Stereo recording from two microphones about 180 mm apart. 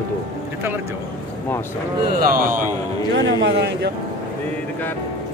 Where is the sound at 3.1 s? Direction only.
70° right (ahead or behind).